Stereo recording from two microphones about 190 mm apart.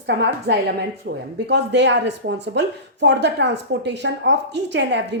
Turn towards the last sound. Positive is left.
turn(degrees=-70)  # may be behind; listen again after turning